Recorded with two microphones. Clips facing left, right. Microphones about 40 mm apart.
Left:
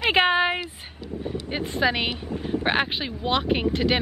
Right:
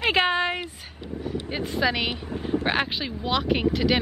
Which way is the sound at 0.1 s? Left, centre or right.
Centre.